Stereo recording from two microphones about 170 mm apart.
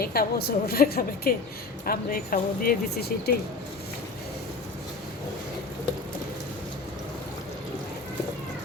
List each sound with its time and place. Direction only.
0.0 s speech: 65° left (ahead or behind)